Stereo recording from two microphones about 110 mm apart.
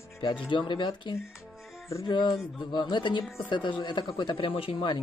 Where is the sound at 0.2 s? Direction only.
45° left (ahead or behind).